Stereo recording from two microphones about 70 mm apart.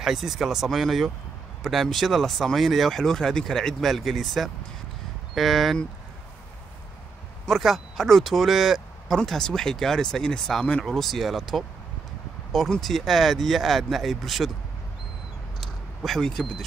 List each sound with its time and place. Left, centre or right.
0.0 s speech: centre
7.4 s speech: centre
9.1 s speech: centre
15.6 s a sound: centre
16.2 s speech: centre